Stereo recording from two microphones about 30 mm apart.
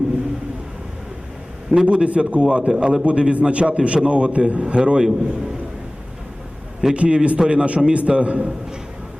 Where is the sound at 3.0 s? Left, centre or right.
Right.